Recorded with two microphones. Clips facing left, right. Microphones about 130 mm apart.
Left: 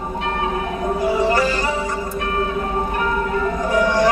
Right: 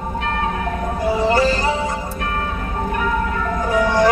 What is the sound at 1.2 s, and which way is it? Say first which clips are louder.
Music: right 2 dB; 30° right (ahead or behind).